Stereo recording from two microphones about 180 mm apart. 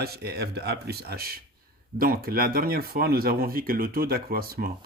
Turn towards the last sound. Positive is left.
turn(degrees=-55)  # may be behind; listen again after turning